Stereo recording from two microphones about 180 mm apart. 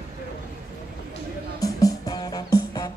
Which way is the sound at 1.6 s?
20° left (ahead or behind).